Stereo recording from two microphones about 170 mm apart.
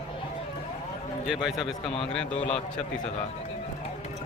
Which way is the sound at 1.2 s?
Centre (ahead or behind).